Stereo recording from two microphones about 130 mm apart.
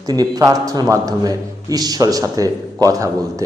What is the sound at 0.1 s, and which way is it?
A man's voice, 30° right (ahead or behind).